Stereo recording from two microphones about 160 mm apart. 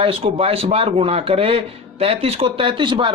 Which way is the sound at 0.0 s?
35° right (ahead or behind).